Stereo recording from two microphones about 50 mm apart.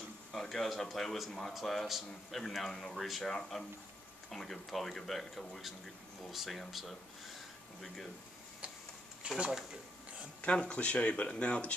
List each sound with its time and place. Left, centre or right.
0.3 s speech: centre
9.4 s speech: centre
10.4 s speech: left